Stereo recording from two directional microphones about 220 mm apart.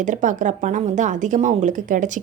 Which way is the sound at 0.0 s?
35° right (ahead or behind).